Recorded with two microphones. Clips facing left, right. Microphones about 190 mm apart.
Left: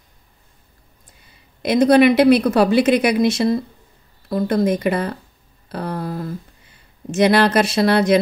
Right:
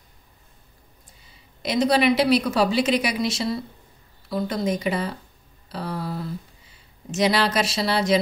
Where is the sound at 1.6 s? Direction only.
55° left (ahead or behind).